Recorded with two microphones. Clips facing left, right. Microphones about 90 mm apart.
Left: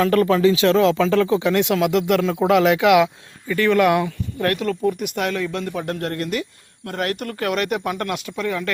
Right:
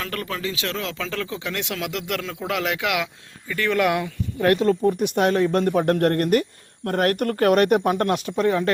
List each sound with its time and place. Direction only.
0.0 s speech: 30° left (ahead or behind)
1.7 s speech: 15° left (ahead or behind)
3.5 s speech: centre (ahead or behind)
4.4 s speech: 25° right (ahead or behind)